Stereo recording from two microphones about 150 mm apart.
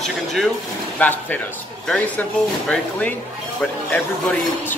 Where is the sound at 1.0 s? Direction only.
10° left (ahead or behind).